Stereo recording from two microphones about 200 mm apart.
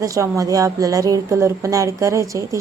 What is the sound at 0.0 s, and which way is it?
A woman's voice, 15° right (ahead or behind).